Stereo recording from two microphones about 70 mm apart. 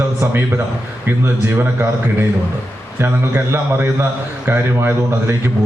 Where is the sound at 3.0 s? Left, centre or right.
Right.